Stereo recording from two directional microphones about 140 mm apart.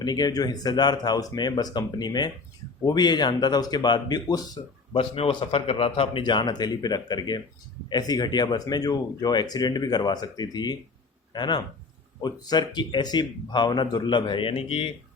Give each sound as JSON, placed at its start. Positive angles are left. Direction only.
{"t": 0.0, "sound": "speech", "side_deg": 30}
{"t": 4.9, "sound": "speech", "side_deg": 40}